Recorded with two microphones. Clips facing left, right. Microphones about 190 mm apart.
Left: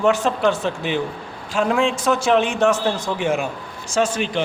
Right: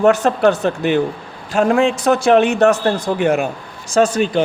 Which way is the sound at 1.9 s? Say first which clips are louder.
Right 5 dB; 65° right (ahead or behind).